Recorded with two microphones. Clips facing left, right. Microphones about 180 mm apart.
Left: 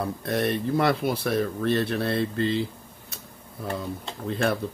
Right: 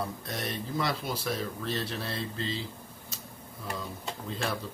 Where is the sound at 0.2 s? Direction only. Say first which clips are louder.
Left 10 dB; 60° left (ahead or behind).